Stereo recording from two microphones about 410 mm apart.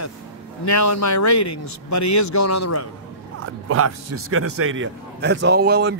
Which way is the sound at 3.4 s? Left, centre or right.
Right.